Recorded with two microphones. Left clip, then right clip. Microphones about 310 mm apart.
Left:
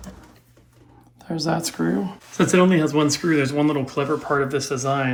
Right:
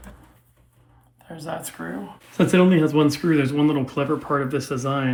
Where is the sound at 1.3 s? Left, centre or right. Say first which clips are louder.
Left 7 dB; left.